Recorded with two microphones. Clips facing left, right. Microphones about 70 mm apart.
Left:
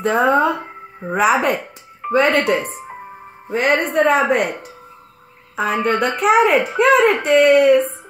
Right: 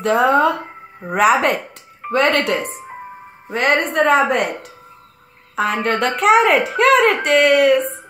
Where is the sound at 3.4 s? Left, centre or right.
Right.